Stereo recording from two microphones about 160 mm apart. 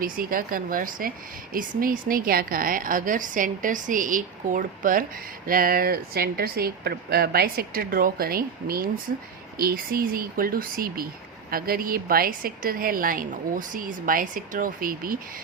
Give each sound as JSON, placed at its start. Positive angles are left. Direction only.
{"t": 0.0, "sound": "a woman's voice", "side_deg": -65}